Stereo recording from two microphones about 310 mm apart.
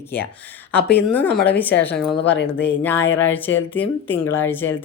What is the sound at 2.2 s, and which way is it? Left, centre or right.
Speech, left.